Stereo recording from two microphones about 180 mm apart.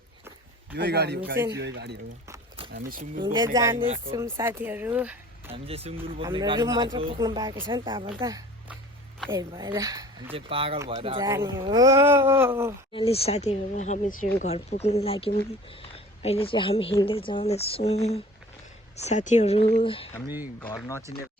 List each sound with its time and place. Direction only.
0.8 s speech: 65° right (ahead or behind)
2.7 s speech: 50° right (ahead or behind)
3.2 s speech: 25° right (ahead or behind)
5.5 s speech: 35° right (ahead or behind)
9.5 s speech: 25° right (ahead or behind)
11.5 s speech: 20° right (ahead or behind)
12.9 s speech: 30° left (ahead or behind); by 14.4 s 55° left (ahead or behind)
14.4 s speech: 35° left (ahead or behind)
20.6 s speech: 15° left (ahead or behind)